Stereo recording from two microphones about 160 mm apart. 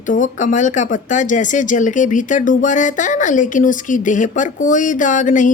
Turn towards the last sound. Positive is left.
turn(degrees=55)  # may be behind; listen again after turning